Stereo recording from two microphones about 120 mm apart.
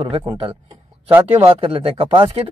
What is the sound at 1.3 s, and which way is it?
Speech, 50° right (ahead or behind).